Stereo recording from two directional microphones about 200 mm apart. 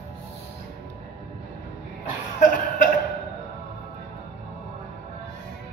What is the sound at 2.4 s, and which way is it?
Cough, 40° left (ahead or behind).